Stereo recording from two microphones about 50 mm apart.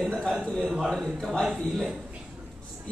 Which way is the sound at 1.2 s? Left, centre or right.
Centre.